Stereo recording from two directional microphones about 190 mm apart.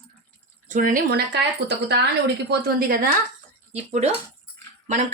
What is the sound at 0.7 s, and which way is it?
Speech, 45° right (ahead or behind).